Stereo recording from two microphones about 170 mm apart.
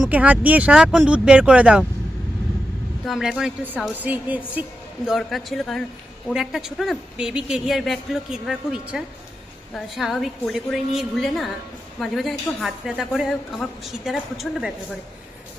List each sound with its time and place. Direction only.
0.0 s speech: 10° right (ahead or behind)
3.1 s speech: centre (ahead or behind)